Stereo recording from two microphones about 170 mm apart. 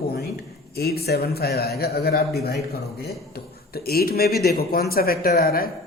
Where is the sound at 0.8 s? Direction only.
65° left (ahead or behind).